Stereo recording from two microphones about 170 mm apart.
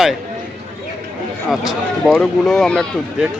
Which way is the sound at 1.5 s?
Centre (ahead or behind).